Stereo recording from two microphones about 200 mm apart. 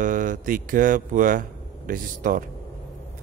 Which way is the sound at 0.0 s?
40° right (ahead or behind).